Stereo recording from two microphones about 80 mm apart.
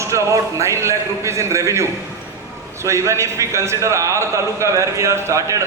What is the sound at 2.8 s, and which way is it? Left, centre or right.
A man's voice, right.